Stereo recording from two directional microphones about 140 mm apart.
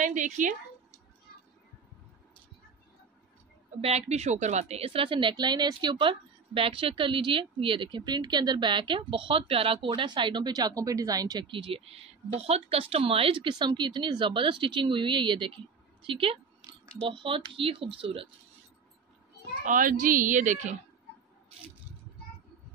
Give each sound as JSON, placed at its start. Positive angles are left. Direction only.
{"t": 0.0, "sound": "a woman's voice", "side_deg": -65}
{"t": 3.8, "sound": "a woman's voice", "side_deg": -50}
{"t": 19.6, "sound": "speech", "side_deg": -70}